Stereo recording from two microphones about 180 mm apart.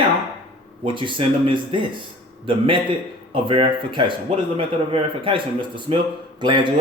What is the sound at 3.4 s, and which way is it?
Speech, 30° right (ahead or behind).